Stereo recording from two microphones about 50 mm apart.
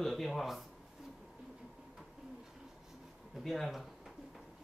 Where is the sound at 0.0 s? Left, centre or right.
Centre.